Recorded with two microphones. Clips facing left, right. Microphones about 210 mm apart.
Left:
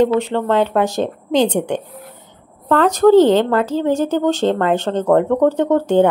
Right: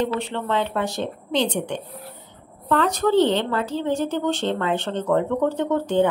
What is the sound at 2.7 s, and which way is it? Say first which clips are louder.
Speech: left 8 dB; 45° left (ahead or behind).